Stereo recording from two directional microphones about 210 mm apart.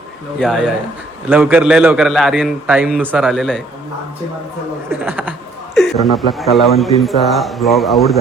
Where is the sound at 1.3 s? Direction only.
5° right (ahead or behind).